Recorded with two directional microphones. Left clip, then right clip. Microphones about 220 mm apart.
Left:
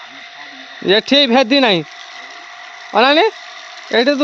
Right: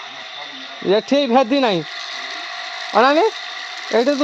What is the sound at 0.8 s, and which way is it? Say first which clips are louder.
Speech: left 4 dB; 30° left (ahead or behind).